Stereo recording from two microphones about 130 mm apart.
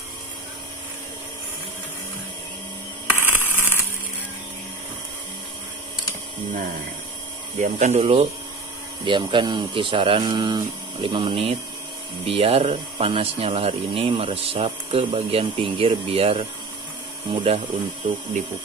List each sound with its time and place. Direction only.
3.2 s a sound: 15° right (ahead or behind)
7.6 s speech: 65° right (ahead or behind)
8.0 s speech: 45° right (ahead or behind)